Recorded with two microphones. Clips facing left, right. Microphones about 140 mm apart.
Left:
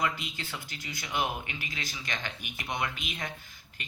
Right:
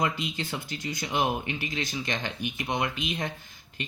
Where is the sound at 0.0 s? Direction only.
25° right (ahead or behind).